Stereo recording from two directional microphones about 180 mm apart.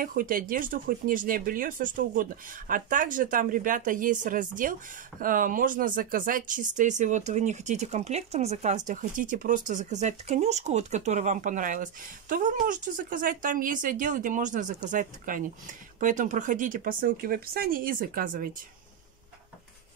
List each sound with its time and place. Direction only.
0.0 s speech: 50° right (ahead or behind)